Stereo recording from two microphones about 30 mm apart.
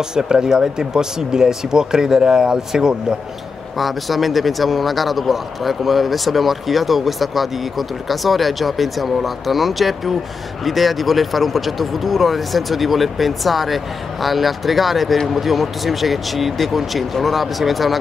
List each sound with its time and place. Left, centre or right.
0.1 s speech: right
3.7 s speech: centre